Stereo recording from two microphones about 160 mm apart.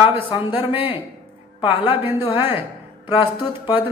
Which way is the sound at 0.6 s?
35° left (ahead or behind).